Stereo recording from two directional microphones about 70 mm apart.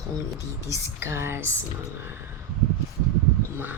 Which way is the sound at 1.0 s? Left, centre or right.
Right.